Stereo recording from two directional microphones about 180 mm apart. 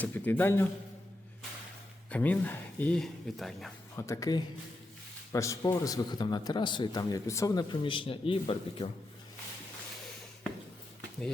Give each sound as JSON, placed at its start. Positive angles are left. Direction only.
{"t": 0.0, "sound": "speech", "side_deg": 10}
{"t": 2.0, "sound": "speech", "side_deg": 10}
{"t": 3.9, "sound": "a man's voice", "side_deg": 15}